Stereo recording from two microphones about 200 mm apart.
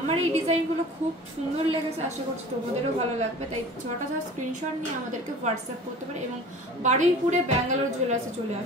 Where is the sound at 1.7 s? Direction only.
35° right (ahead or behind).